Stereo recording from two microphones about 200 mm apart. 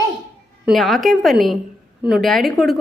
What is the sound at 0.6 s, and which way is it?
A woman's voice, centre (ahead or behind).